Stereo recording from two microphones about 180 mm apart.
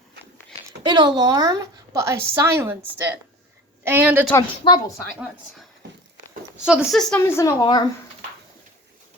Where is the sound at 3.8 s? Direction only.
10° right (ahead or behind).